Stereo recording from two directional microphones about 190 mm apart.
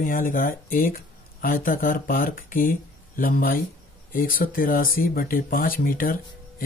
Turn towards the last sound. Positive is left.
turn(degrees=50)  # may be behind; listen again after turning